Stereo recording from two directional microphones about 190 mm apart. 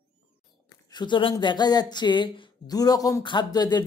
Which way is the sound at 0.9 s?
25° left (ahead or behind).